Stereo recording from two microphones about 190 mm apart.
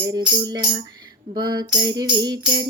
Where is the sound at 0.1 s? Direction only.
20° right (ahead or behind).